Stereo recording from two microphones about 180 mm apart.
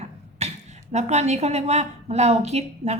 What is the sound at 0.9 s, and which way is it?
A woman's voice, 40° right (ahead or behind).